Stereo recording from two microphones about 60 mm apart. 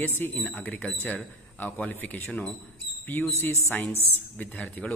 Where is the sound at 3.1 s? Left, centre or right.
Left.